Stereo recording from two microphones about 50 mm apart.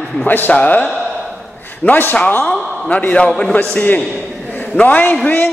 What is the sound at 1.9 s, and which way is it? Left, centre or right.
Speech, left.